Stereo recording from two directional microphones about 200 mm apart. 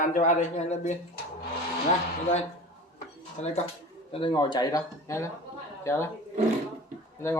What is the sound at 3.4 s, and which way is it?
Speech, 35° left (ahead or behind).